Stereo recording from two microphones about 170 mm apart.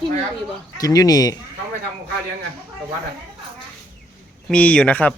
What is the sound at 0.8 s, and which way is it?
Speech, 20° left (ahead or behind).